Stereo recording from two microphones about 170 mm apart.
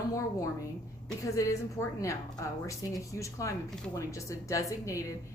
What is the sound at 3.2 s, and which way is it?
A woman's voice, 20° left (ahead or behind).